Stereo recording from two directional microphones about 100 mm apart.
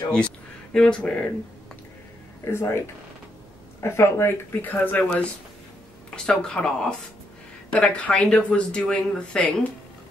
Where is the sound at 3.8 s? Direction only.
25° left (ahead or behind).